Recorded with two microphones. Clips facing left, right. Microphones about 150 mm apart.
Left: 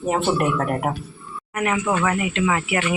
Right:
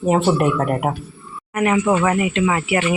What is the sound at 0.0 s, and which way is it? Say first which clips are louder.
Speech: right 4 dB; 20° right (ahead or behind).